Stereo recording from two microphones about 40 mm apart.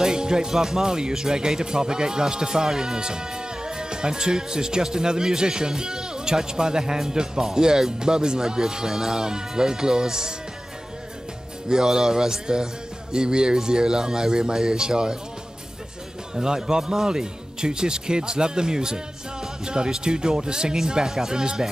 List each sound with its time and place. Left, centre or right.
0.0 s speech: centre
11.7 s a man's voice: centre
16.3 s speech: centre